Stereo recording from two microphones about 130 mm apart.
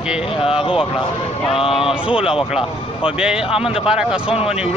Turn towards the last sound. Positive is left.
turn(degrees=-5)  # may be behind; listen again after turning